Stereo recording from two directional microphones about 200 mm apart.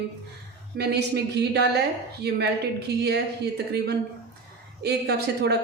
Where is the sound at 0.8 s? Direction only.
55° right (ahead or behind).